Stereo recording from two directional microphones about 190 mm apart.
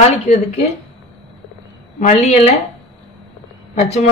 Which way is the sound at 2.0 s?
35° left (ahead or behind).